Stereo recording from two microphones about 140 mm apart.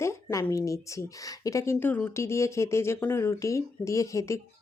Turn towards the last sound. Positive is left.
turn(degrees=20)  # may be behind; listen again after turning